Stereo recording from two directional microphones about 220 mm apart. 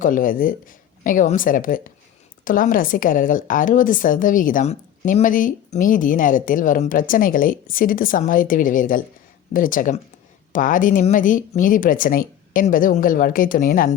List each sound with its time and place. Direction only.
0.0 s a woman's voice: 40° left (ahead or behind)